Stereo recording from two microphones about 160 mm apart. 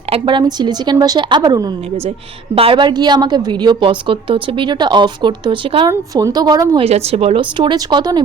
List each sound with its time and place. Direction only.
0.1 s a woman's voice: 30° right (ahead or behind)
6.8 s speech: 40° right (ahead or behind)